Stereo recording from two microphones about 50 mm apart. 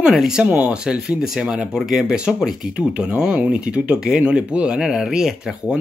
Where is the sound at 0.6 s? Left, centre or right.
Centre.